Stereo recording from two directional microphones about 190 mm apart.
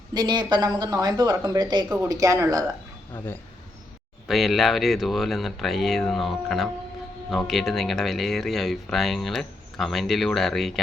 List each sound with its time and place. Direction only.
0.1 s speech: 20° right (ahead or behind)
4.3 s speech: centre (ahead or behind)